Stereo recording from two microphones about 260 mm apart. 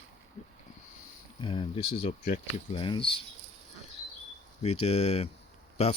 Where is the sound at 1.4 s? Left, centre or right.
Centre.